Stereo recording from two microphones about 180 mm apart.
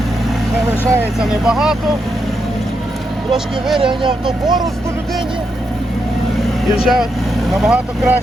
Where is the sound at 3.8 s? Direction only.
25° right (ahead or behind).